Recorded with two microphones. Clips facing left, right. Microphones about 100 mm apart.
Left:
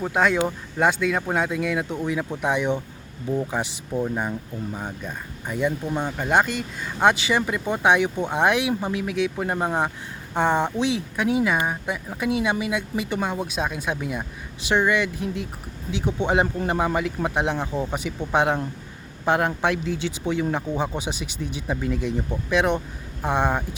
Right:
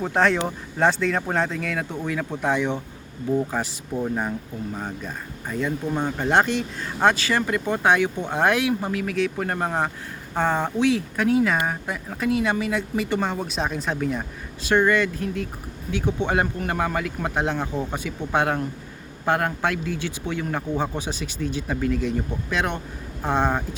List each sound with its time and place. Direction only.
0.0 s speech: 5° left (ahead or behind)
4.0 s speech: centre (ahead or behind)
5.0 s speech: 15° left (ahead or behind)
5.9 s speech: 5° right (ahead or behind)
7.0 s speech: 15° left (ahead or behind)